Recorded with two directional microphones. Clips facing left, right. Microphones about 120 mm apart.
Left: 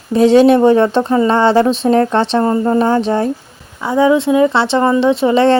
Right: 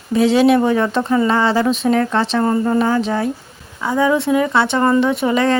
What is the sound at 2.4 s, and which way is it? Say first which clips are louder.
Speech: left 1 dB; 25° left (ahead or behind).